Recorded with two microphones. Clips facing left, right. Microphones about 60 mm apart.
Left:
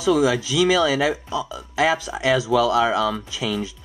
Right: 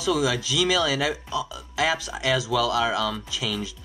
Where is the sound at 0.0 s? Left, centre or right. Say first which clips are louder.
Left 5 dB; left.